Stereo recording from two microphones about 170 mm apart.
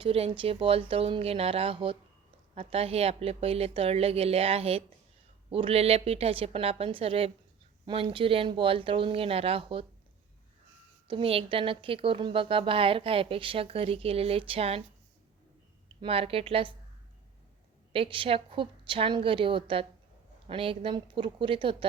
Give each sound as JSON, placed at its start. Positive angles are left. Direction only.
{"t": 0.0, "sound": "a woman's voice", "side_deg": -35}
{"t": 11.1, "sound": "a woman's voice", "side_deg": -35}
{"t": 16.0, "sound": "a woman's voice", "side_deg": -35}
{"t": 17.9, "sound": "a woman's voice", "side_deg": -30}